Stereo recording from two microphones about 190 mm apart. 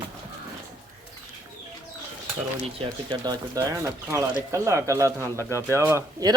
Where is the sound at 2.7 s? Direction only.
25° right (ahead or behind).